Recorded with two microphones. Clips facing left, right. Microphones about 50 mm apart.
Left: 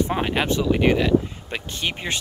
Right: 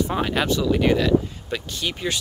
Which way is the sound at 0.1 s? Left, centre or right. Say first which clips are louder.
Even; left.